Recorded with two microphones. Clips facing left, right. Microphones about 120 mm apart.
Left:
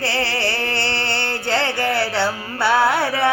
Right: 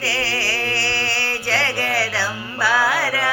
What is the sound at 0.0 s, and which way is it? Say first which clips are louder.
Music: left 3 dB; 25° left (ahead or behind).